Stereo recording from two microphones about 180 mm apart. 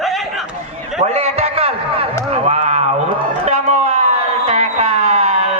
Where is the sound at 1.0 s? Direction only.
35° right (ahead or behind).